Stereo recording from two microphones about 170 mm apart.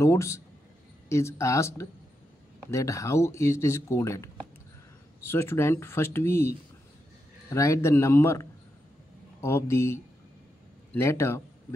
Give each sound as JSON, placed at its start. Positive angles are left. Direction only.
{"t": 0.0, "sound": "speech", "side_deg": 15}